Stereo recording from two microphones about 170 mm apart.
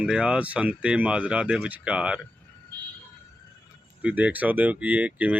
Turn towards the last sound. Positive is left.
turn(degrees=-10)  # may be behind; listen again after turning